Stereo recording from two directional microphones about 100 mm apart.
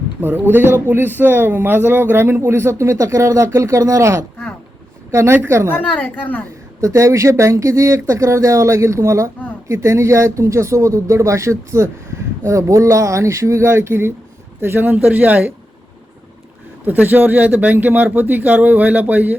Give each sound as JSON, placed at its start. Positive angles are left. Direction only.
{"t": 0.2, "sound": "a man's voice", "side_deg": -20}
{"t": 5.7, "sound": "a woman's voice", "side_deg": 15}
{"t": 6.8, "sound": "a man's voice", "side_deg": -30}
{"t": 16.8, "sound": "speech", "side_deg": -20}